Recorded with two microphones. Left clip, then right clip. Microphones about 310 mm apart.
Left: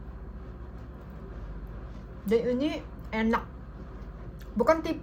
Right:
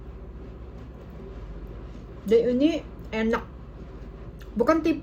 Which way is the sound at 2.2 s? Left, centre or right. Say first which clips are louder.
Right 6 dB; centre.